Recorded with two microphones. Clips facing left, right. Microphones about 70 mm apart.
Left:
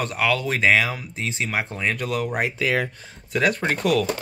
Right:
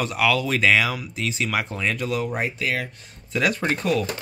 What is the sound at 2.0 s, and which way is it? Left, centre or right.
Speech, left.